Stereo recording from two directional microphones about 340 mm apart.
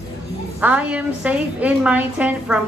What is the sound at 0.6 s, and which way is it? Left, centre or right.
A woman's voice, centre.